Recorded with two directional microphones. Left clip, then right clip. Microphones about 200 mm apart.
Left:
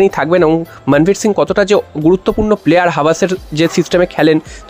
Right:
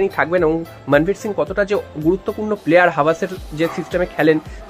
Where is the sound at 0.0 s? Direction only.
55° left (ahead or behind).